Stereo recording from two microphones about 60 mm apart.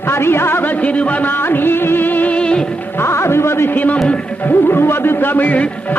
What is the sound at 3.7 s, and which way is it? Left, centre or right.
Music, left.